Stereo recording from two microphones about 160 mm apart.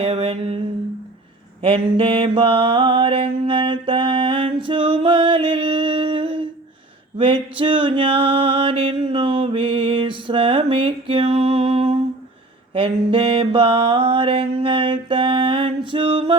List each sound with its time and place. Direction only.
0.0 s mantra: 35° right (ahead or behind)
1.6 s mantra: 35° right (ahead or behind)